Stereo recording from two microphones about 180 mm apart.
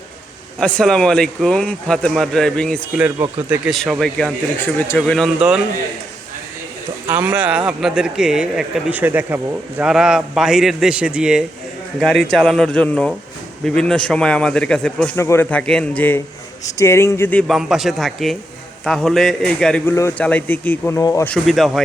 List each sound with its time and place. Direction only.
0.6 s a man's voice: 5° left (ahead or behind)
3.0 s a man's voice: 10° right (ahead or behind)
7.1 s a man's voice: 10° right (ahead or behind); by 17.4 s 10° left (ahead or behind)
17.5 s a man's voice: centre (ahead or behind); by 21.3 s 15° left (ahead or behind)
21.3 s a man's voice: centre (ahead or behind)